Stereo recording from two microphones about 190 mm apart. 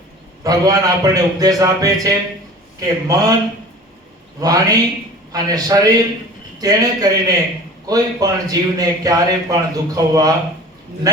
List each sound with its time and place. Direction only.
0.4 s a man's voice: 20° right (ahead or behind)
4.4 s a man's voice: 20° right (ahead or behind)